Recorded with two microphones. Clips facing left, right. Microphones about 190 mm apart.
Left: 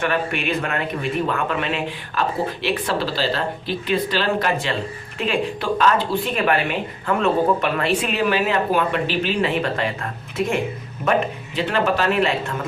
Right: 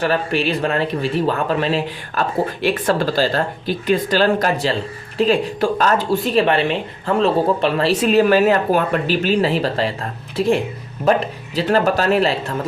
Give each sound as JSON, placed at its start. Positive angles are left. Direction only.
{"t": 0.0, "sound": "speech", "side_deg": -35}